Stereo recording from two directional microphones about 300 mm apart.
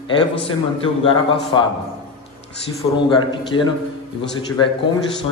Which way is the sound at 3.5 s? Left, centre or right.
Left.